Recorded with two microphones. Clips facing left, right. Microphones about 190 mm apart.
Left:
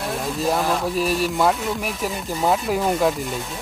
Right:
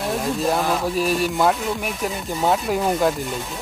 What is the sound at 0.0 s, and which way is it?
Speech, centre (ahead or behind).